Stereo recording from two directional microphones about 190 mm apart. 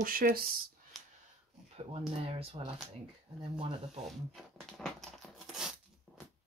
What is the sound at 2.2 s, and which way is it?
Speech, 30° right (ahead or behind).